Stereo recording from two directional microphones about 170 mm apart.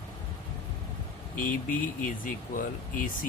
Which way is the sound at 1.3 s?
50° left (ahead or behind).